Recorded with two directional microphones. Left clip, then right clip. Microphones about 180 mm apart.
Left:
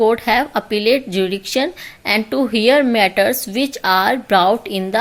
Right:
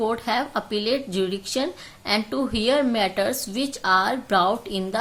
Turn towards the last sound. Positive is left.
turn(degrees=25)  # may be behind; listen again after turning